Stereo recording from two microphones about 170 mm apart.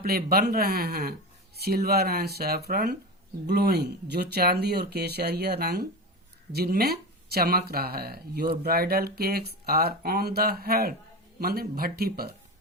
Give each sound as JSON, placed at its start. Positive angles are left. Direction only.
{"t": 0.0, "sound": "speech", "side_deg": -65}